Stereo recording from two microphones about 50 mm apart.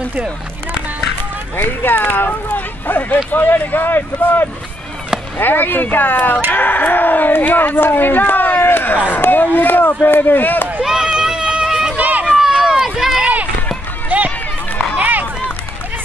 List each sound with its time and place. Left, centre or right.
1.6 s speech: left
10.8 s run: centre
12.0 s run: right
12.3 s run: centre
13.2 s run: right